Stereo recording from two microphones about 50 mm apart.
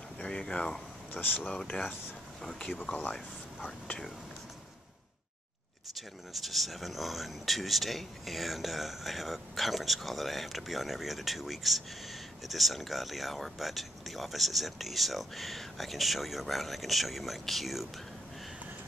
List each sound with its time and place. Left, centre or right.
0.2 s speech: centre
1.1 s speech: left
5.9 s speech: centre